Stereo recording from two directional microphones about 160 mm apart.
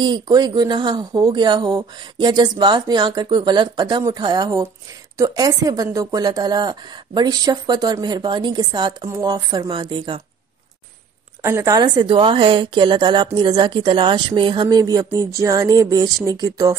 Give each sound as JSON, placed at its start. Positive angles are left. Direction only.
{"t": 0.0, "sound": "speech", "side_deg": -25}
{"t": 11.4, "sound": "speech", "side_deg": -20}